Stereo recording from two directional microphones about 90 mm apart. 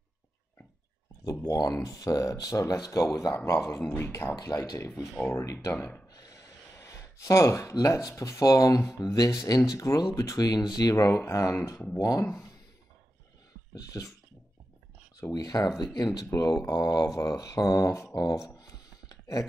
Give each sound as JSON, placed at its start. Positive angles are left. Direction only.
{"t": 1.2, "sound": "speech", "side_deg": 35}
{"t": 5.8, "sound": "speech", "side_deg": 20}
{"t": 6.1, "sound": "speech", "side_deg": 40}
{"t": 13.7, "sound": "speech", "side_deg": 40}
{"t": 15.1, "sound": "speech", "side_deg": 40}
{"t": 16.3, "sound": "speech", "side_deg": 30}
{"t": 16.6, "sound": "speech", "side_deg": 45}
{"t": 18.1, "sound": "a sound", "side_deg": 40}